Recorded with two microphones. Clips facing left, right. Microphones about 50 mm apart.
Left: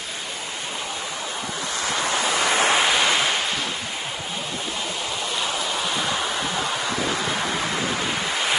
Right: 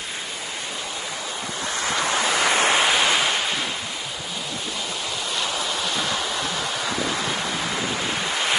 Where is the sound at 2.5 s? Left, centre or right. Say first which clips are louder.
Left 1 dB; centre.